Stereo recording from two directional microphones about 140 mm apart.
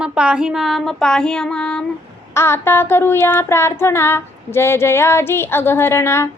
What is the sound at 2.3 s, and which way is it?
Child singing, 15° left (ahead or behind).